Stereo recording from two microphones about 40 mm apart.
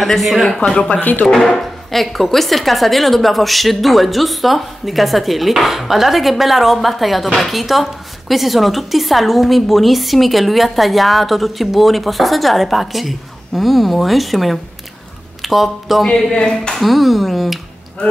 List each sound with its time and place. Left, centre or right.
0.0 s a woman's voice: centre
1.2 s a woman's voice: centre
16.3 s a woman's voice: left
16.7 s a woman's voice: centre